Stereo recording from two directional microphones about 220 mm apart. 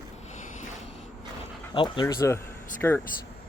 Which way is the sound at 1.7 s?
20° left (ahead or behind).